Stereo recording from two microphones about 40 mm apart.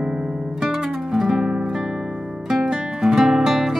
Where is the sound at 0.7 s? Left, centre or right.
Centre.